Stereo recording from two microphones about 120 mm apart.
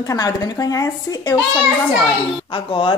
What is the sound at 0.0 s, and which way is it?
Speech, 30° left (ahead or behind).